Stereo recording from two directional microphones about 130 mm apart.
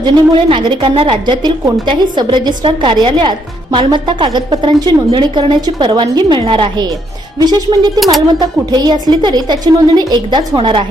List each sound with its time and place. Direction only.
0.0 s speech: 40° right (ahead or behind)
7.9 s speech: centre (ahead or behind)
8.4 s speech: 35° right (ahead or behind)